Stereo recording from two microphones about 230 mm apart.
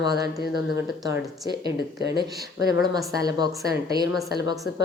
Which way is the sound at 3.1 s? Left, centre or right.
Centre.